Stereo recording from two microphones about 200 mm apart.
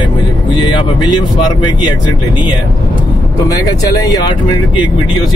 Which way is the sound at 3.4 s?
15° left (ahead or behind).